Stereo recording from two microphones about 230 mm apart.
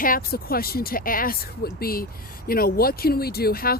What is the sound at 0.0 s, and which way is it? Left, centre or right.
Speech, left.